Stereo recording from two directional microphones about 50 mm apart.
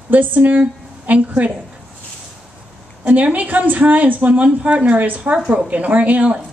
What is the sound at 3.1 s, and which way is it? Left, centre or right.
A woman's voice, right.